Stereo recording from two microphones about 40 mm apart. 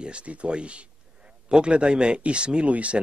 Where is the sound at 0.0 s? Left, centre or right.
Right.